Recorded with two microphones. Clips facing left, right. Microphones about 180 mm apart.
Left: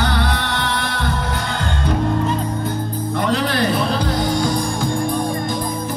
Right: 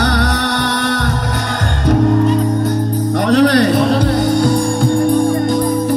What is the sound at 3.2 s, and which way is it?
Music, 70° right (ahead or behind).